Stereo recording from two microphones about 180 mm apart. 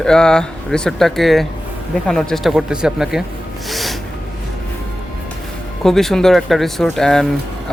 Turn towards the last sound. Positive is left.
turn(degrees=0)  # may be behind; listen again after turning